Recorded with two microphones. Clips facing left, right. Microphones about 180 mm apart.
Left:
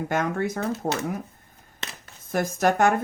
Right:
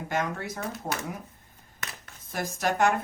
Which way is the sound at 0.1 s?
50° left (ahead or behind).